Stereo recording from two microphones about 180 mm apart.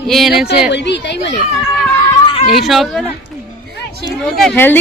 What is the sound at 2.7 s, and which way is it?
Speech, centre (ahead or behind).